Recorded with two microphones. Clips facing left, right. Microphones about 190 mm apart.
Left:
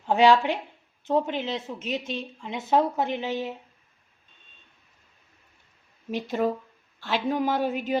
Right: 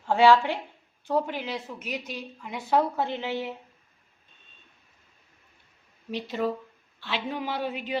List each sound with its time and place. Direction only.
0.0 s a woman's voice: 20° left (ahead or behind)
6.1 s a man's voice: 50° left (ahead or behind)